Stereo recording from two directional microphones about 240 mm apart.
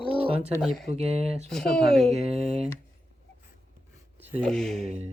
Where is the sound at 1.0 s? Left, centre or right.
Right.